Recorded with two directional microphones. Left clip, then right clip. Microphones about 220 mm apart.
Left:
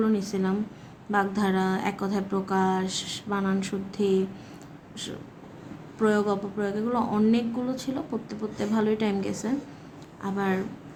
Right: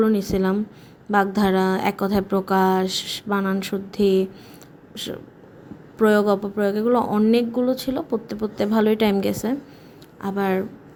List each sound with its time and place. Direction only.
0.0 s speech: 35° right (ahead or behind)